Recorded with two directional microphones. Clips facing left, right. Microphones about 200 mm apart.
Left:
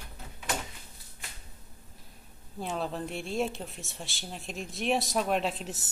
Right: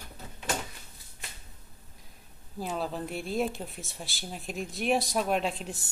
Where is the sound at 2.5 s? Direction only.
Centre (ahead or behind).